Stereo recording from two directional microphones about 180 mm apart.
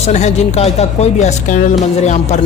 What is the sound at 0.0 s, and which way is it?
Speech, 40° left (ahead or behind).